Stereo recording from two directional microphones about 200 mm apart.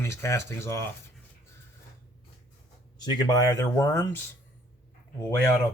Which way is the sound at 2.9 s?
20° left (ahead or behind).